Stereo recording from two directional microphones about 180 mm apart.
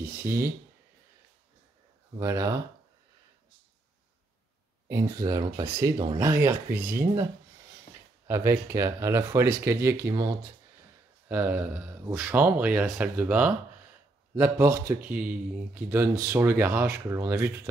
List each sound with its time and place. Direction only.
0.0 s speech: 10° right (ahead or behind)
2.1 s speech: 15° right (ahead or behind)
4.8 s speech: 20° right (ahead or behind)
8.3 s speech: 15° right (ahead or behind)